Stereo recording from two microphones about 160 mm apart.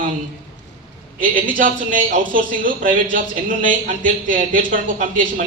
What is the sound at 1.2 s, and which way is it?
Speech, 60° right (ahead or behind).